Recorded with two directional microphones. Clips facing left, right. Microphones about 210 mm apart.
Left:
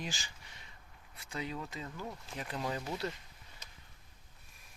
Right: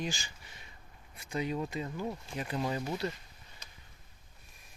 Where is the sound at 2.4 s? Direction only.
5° right (ahead or behind).